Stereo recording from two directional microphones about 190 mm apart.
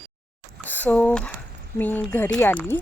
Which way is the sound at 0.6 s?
10° left (ahead or behind).